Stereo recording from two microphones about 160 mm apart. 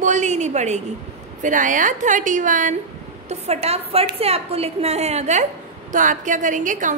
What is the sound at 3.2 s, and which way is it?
A woman's voice, 40° right (ahead or behind).